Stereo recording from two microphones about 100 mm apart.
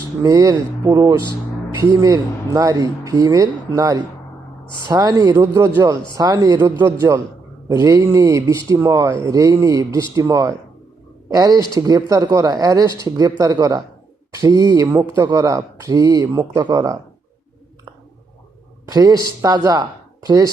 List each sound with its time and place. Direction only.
0.2 s speech: 35° right (ahead or behind)
5.2 s speech: 25° right (ahead or behind)
6.6 s speech: 20° right (ahead or behind)
16.6 s speech: 45° right (ahead or behind)
18.9 s speech: 40° right (ahead or behind)